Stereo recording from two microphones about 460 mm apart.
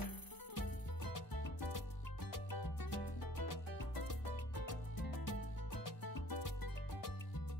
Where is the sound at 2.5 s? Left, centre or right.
Left.